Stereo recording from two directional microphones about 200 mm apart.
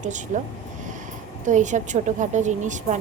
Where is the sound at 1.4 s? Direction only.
35° right (ahead or behind).